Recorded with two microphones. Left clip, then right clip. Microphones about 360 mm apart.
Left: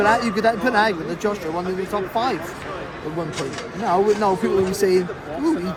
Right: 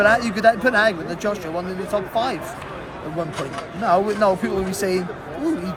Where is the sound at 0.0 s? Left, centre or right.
Centre.